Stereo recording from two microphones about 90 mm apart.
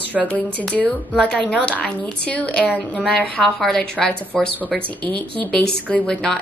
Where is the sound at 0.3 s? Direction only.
15° left (ahead or behind).